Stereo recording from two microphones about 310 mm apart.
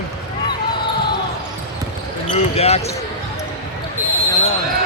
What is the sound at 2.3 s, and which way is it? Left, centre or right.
Speech, centre.